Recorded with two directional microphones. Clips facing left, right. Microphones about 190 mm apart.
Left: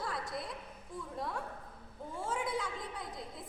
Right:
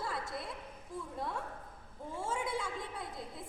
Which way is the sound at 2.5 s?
5° right (ahead or behind).